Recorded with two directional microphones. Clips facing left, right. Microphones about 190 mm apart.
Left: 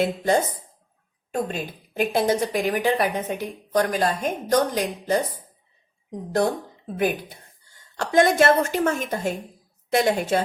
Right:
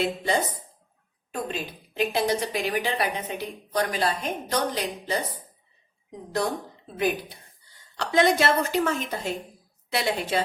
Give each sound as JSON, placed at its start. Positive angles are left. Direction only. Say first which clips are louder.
{"t": 0.0, "sound": "a woman's voice", "louder": "left 4 dB", "side_deg": 45}
{"t": 7.9, "sound": "a woman's voice", "louder": "left 3 dB", "side_deg": 50}